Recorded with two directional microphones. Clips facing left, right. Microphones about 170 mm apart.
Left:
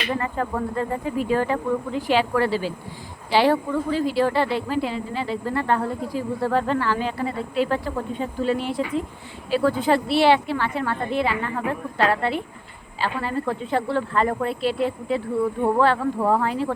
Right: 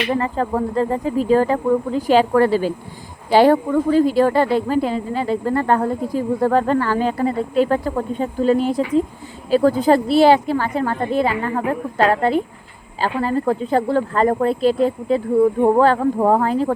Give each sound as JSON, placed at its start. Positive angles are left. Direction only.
{"t": 0.2, "sound": "speech", "side_deg": -35}